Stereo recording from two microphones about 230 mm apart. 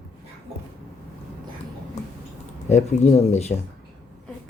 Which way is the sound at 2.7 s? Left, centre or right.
Left.